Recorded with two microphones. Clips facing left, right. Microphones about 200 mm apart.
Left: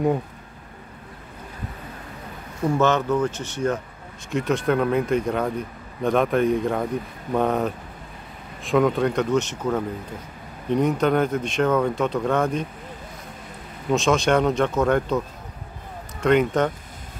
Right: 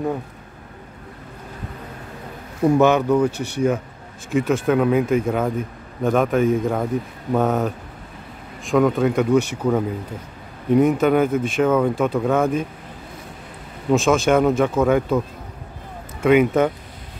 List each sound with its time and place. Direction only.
2.8 s speech: 10° right (ahead or behind)
13.9 s speech: 5° right (ahead or behind)